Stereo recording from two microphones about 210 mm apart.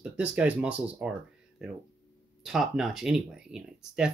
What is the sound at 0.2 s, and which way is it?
Speech, 5° right (ahead or behind).